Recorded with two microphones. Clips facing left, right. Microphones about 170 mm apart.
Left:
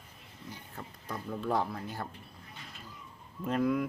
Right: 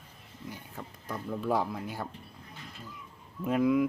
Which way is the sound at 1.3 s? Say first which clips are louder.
Right 2 dB; 10° right (ahead or behind).